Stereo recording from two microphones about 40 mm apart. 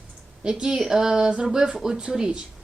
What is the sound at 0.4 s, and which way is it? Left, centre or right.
A woman's voice, centre.